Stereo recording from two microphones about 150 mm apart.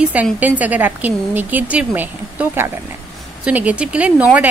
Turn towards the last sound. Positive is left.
turn(degrees=-10)  # may be behind; listen again after turning